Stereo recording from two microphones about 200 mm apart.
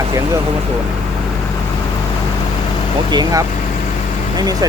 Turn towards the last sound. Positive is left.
turn(degrees=-20)  # may be behind; listen again after turning